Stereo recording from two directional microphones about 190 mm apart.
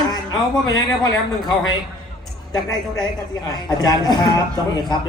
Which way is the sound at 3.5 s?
20° left (ahead or behind).